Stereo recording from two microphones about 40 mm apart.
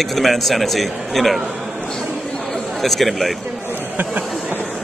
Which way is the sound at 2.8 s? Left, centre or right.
Centre.